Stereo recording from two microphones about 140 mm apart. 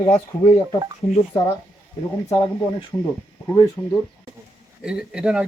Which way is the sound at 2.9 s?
15° left (ahead or behind).